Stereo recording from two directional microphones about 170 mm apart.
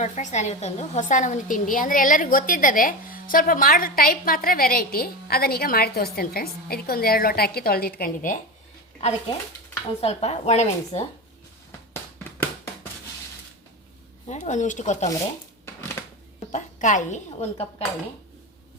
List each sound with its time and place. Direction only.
0.0 s a woman's voice: 45° left (ahead or behind)
10.0 s speech: 35° left (ahead or behind)
14.3 s a woman's voice: 45° left (ahead or behind)
16.5 s a woman's voice: 50° left (ahead or behind)